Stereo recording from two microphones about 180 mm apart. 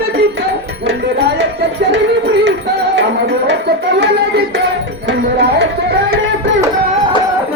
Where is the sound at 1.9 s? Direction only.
85° right; by 6.1 s 65° right (ahead or behind).